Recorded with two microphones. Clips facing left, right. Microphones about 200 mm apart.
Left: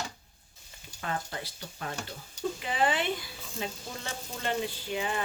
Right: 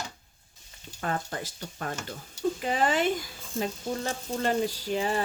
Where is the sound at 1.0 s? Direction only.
45° right (ahead or behind).